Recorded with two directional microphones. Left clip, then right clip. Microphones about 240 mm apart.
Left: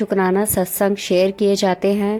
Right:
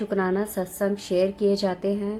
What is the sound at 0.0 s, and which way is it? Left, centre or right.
A woman's voice, left.